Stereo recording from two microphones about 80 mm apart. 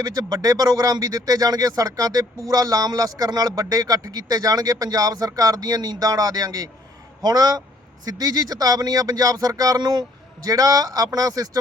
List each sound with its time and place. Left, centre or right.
0.0 s speech: right